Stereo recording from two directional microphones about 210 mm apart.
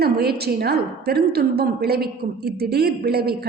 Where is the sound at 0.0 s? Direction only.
50° right (ahead or behind).